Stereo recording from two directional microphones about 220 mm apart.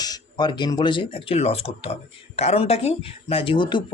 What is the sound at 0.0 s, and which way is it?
Speech, 20° left (ahead or behind).